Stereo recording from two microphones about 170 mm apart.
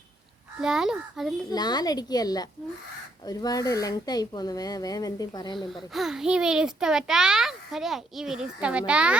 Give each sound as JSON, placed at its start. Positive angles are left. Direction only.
{"t": 0.6, "sound": "a child's voice", "side_deg": -5}
{"t": 1.5, "sound": "speech", "side_deg": 25}
{"t": 5.5, "sound": "a child's voice", "side_deg": 0}